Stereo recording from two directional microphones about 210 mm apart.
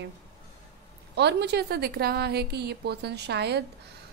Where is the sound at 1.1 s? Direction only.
55° right (ahead or behind).